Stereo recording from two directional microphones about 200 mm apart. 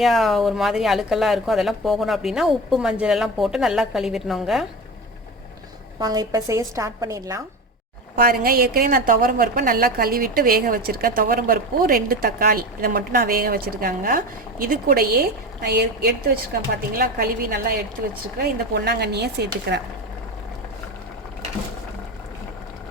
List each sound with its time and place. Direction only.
0.0 s speech: centre (ahead or behind)
6.0 s a woman's voice: 20° right (ahead or behind)
8.1 s a woman's voice: 45° right (ahead or behind)